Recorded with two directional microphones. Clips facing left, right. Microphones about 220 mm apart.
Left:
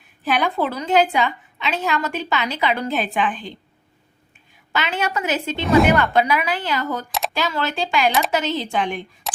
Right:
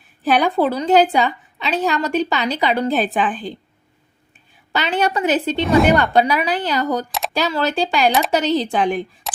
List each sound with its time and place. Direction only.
0.3 s a woman's voice: 35° right (ahead or behind)
4.7 s a woman's voice: 35° right (ahead or behind)
5.5 s a woman's voice: centre (ahead or behind)
5.9 s a woman's voice: 30° right (ahead or behind)
7.1 s a sound: centre (ahead or behind)
7.3 s a woman's voice: 40° right (ahead or behind)
9.2 s a sound: centre (ahead or behind)